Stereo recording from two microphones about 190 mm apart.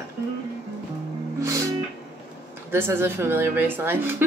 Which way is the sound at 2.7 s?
10° right (ahead or behind).